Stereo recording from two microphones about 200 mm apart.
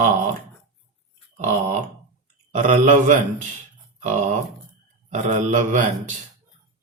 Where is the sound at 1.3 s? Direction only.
35° right (ahead or behind).